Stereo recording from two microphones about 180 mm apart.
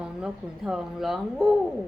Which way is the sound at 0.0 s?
5° right (ahead or behind).